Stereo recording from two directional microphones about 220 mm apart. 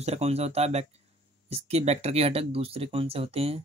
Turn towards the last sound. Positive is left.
turn(degrees=-25)  # may be behind; listen again after turning